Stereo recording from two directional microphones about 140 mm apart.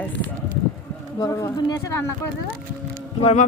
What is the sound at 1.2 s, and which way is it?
Speech, 20° left (ahead or behind).